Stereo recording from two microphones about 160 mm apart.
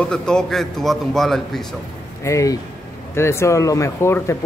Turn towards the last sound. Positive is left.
turn(degrees=15)  # may be behind; listen again after turning